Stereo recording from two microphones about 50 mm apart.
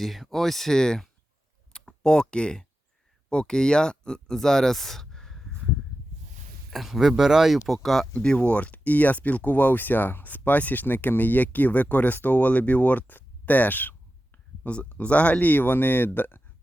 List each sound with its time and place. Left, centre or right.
0.0 s speech: centre
6.7 s speech: centre
7.7 s speech: centre
8.2 s speech: left
14.6 s speech: left